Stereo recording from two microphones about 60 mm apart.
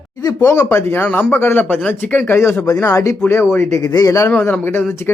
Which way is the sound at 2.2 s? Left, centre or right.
Left.